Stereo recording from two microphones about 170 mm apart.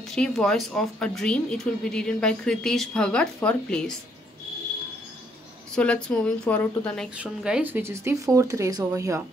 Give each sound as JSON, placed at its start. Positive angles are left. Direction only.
{"t": 0.1, "sound": "speech", "side_deg": 5}
{"t": 5.8, "sound": "a woman's voice", "side_deg": 5}
{"t": 7.2, "sound": "speech", "side_deg": -5}